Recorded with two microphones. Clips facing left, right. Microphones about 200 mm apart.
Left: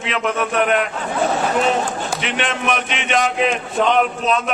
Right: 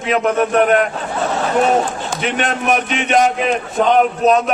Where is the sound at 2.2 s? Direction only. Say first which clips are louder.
Right 7 dB; 40° right (ahead or behind).